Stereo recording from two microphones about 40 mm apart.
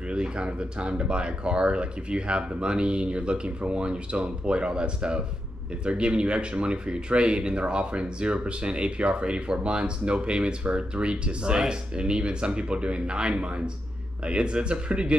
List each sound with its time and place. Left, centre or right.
0.1 s speech: right